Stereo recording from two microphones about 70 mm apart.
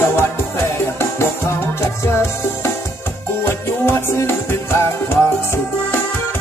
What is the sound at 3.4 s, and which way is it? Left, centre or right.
Music, left.